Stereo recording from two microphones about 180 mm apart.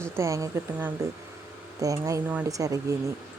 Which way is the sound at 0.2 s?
15° right (ahead or behind).